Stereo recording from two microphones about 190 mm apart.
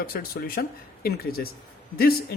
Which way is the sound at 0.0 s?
50° left (ahead or behind).